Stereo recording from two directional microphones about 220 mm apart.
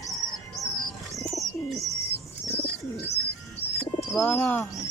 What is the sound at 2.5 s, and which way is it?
Bird, 50° left (ahead or behind).